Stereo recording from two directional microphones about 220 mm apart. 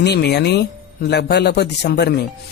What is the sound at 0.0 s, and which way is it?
A man's voice, 50° left (ahead or behind).